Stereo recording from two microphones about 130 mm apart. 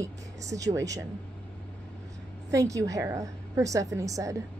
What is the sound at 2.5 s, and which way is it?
A woman's voice, 25° right (ahead or behind).